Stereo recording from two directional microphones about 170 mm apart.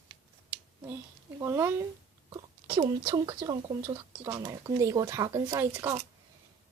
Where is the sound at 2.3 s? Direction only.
25° right (ahead or behind).